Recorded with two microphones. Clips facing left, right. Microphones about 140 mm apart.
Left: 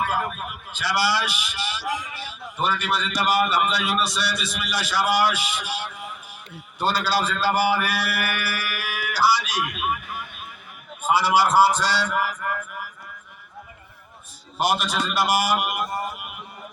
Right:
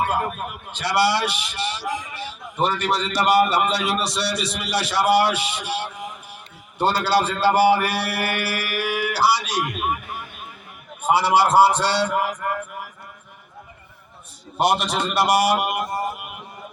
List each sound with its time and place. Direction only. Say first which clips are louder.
0.0 s a man's voice: right 2 dB; 25° right (ahead or behind)
11.0 s a man's voice: right 2 dB; 25° right (ahead or behind)
12.3 s mantra: right 3 dB; 35° right (ahead or behind)
14.6 s a man's voice: right 3 dB; 25° right (ahead or behind)